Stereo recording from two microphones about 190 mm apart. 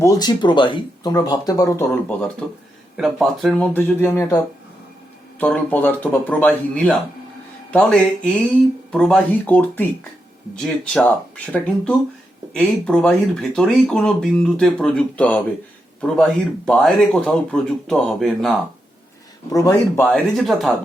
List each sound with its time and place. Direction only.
0.0 s speech: 20° left (ahead or behind)
3.0 s speech: centre (ahead or behind)
5.4 s speech: 10° left (ahead or behind)
19.5 s speech: 20° left (ahead or behind)
20.1 s speech: centre (ahead or behind)